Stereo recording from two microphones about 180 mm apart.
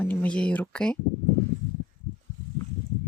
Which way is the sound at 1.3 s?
10° left (ahead or behind).